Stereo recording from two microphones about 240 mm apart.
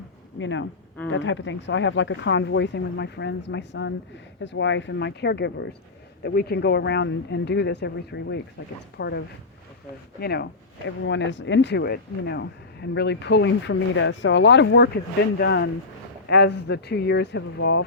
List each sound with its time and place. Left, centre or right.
0.3 s speech: left